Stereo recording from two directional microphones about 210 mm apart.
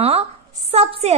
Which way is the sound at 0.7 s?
30° right (ahead or behind).